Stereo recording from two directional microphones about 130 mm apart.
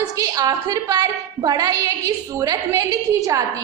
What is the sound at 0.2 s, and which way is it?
A woman's voice, 30° right (ahead or behind).